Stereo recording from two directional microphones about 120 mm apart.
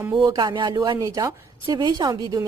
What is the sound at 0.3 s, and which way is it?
A woman's voice, 40° right (ahead or behind).